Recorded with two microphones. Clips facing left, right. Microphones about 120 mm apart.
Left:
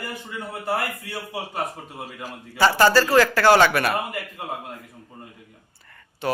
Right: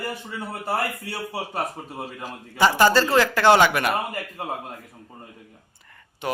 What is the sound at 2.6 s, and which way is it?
A man's voice, 15° right (ahead or behind).